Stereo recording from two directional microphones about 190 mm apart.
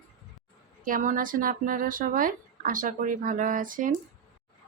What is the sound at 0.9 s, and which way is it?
Speech, 45° right (ahead or behind).